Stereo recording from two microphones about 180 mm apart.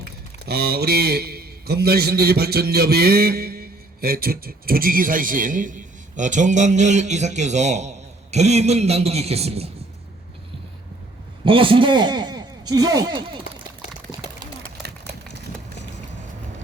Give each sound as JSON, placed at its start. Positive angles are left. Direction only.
{"t": 0.4, "sound": "a man's voice", "side_deg": -60}
{"t": 11.4, "sound": "a man's voice", "side_deg": -30}